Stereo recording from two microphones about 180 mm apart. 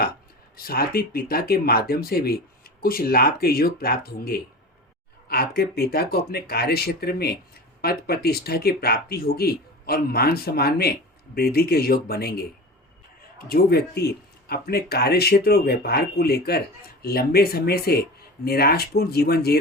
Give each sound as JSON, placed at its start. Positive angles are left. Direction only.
{"t": 0.5, "sound": "speech", "side_deg": 55}
{"t": 13.5, "sound": "speech", "side_deg": 60}